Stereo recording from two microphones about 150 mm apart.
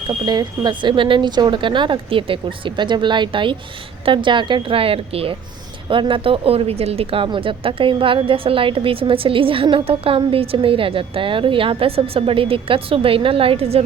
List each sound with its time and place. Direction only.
0.1 s speech: 30° right (ahead or behind)